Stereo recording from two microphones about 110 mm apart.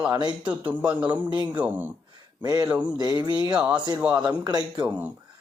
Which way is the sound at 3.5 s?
10° right (ahead or behind).